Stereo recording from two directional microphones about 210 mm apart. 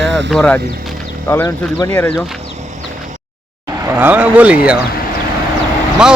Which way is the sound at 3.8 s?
10° right (ahead or behind).